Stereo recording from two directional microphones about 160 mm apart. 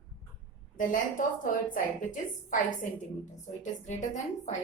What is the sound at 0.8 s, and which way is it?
A woman's voice, 55° left (ahead or behind).